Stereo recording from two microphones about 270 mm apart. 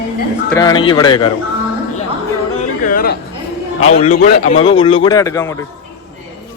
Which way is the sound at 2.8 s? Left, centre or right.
Left.